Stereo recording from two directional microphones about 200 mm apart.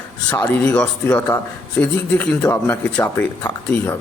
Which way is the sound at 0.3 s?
10° left (ahead or behind).